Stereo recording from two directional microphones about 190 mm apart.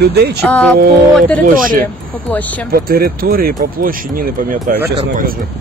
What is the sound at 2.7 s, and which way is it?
Speech, 50° right (ahead or behind).